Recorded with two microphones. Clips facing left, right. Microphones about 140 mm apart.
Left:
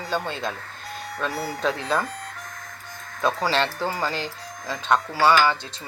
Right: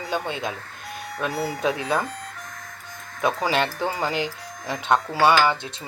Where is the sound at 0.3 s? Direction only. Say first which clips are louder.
Right 1 dB; 15° right (ahead or behind).